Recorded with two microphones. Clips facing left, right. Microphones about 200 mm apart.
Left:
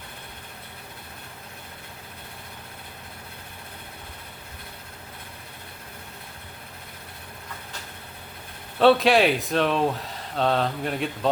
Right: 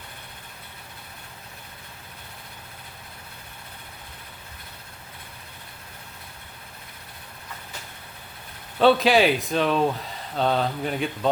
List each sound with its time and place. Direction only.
8.8 s speech: centre (ahead or behind)